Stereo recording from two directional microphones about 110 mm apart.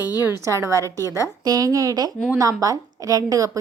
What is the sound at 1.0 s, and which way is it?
Speech, 30° left (ahead or behind).